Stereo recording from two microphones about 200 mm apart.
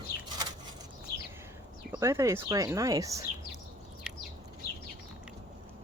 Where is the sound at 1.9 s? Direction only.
15° right (ahead or behind).